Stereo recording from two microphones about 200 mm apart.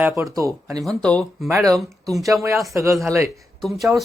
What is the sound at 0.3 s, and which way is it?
Speech, 15° right (ahead or behind).